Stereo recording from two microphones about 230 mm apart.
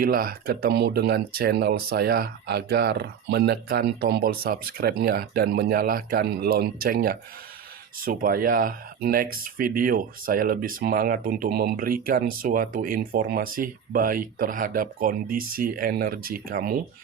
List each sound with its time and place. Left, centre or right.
0.0 s speech: right